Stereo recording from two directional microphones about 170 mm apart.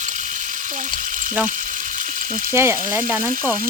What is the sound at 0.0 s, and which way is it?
Frying, 45° right (ahead or behind).